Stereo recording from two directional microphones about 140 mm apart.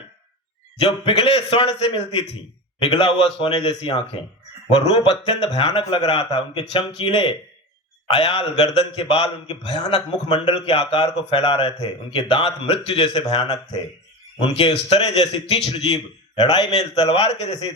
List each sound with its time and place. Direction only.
0.9 s speech: 40° left (ahead or behind)